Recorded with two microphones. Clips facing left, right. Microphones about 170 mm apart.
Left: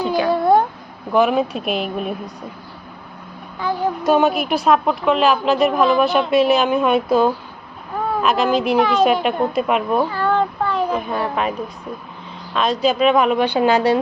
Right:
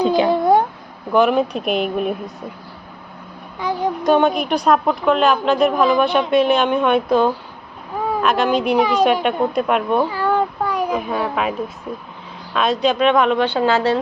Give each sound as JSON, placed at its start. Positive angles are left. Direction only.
{"t": 0.0, "sound": "a sound", "side_deg": -20}
{"t": 1.1, "sound": "a woman's voice", "side_deg": 0}
{"t": 3.6, "sound": "speech", "side_deg": -15}
{"t": 4.0, "sound": "a woman's voice", "side_deg": 5}
{"t": 10.1, "sound": "a sound", "side_deg": -10}
{"t": 11.9, "sound": "a woman's voice", "side_deg": -5}